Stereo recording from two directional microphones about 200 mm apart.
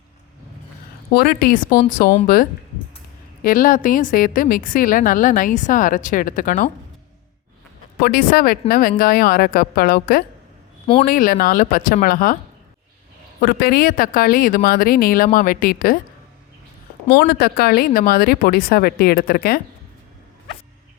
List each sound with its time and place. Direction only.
1.1 s a woman's voice: 50° left (ahead or behind)
8.0 s a woman's voice: 50° left (ahead or behind)
13.4 s a woman's voice: 50° left (ahead or behind)
17.2 s a woman's voice: 50° left (ahead or behind)